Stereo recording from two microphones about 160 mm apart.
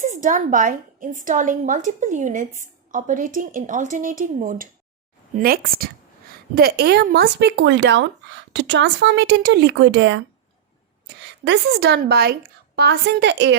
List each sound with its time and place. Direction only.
0.0 s a woman's voice: 50° right (ahead or behind); by 13.6 s 90° right